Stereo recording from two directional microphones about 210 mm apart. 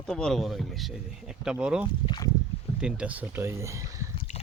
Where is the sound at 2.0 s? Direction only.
20° left (ahead or behind).